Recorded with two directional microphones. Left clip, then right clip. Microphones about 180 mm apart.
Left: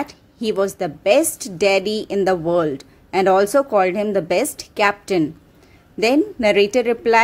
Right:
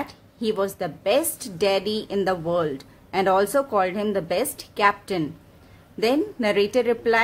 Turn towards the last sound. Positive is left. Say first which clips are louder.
# left 5 dB
turn(degrees=25)  # may be behind; listen again after turning